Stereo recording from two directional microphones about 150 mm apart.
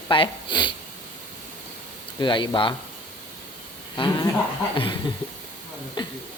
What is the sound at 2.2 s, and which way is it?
Speech, 30° left (ahead or behind).